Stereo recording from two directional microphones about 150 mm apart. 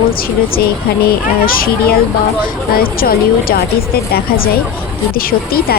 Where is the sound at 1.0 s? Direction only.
80° left.